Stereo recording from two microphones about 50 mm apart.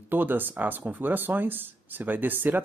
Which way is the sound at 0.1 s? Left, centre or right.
Right.